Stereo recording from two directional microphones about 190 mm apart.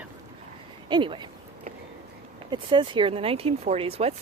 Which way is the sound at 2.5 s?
25° right (ahead or behind).